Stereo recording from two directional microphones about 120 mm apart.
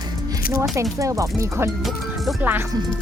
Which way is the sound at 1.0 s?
25° right (ahead or behind).